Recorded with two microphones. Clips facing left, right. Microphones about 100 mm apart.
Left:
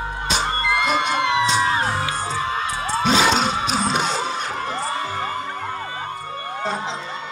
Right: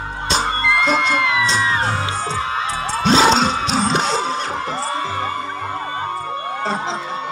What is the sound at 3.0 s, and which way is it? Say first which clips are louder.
Music: right 4 dB; 30° right (ahead or behind).